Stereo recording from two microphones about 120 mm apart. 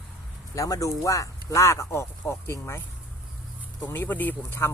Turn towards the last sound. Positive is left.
turn(degrees=15)  # may be behind; listen again after turning